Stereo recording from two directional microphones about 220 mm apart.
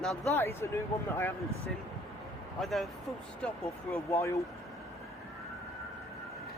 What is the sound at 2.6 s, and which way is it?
Speech, centre (ahead or behind).